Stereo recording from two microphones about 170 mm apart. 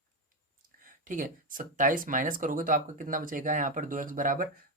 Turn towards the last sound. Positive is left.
turn(degrees=-55)  # may be behind; listen again after turning